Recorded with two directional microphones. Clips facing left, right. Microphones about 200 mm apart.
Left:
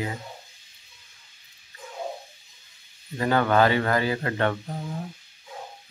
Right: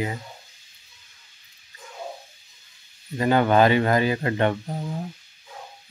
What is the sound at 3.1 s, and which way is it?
A man's voice, 20° right (ahead or behind).